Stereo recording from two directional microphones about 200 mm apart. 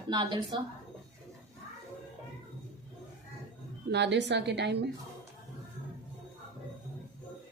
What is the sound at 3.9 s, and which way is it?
A woman's voice, 60° right (ahead or behind).